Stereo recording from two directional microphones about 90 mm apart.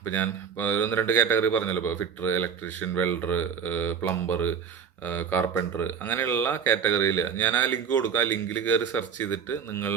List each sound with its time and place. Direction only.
0.0 s speech: 25° left (ahead or behind)